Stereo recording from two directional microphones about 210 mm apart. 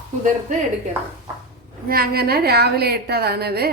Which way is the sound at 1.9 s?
45° right (ahead or behind).